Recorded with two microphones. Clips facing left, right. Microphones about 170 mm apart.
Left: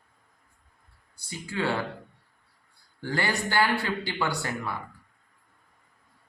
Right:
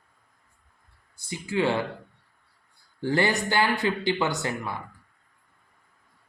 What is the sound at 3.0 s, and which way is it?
Speech, 20° right (ahead or behind).